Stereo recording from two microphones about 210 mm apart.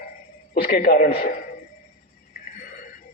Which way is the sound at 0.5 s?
45° left (ahead or behind).